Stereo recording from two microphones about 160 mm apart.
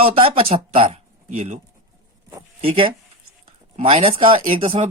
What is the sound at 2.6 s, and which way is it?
Speech, 35° right (ahead or behind).